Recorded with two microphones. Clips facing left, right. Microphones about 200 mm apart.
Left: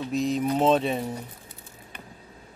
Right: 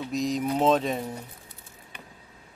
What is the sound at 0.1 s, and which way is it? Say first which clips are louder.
Speech: left 2 dB; 35° right (ahead or behind).